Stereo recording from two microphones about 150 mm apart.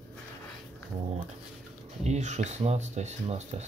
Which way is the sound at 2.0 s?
50° right (ahead or behind).